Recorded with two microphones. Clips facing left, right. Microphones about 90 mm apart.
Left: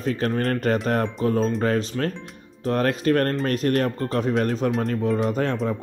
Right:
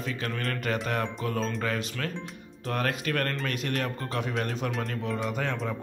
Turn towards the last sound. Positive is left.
turn(degrees=40)  # may be behind; listen again after turning